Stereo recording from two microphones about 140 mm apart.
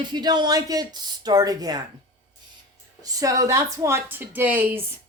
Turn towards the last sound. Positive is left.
turn(degrees=-10)  # may be behind; listen again after turning